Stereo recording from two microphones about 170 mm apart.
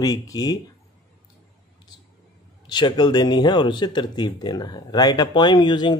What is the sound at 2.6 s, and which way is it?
Speech, 25° left (ahead or behind).